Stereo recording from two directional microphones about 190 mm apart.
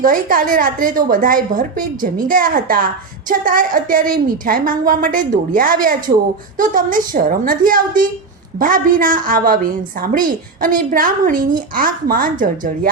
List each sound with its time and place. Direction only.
0.0 s a woman's voice: 50° right (ahead or behind)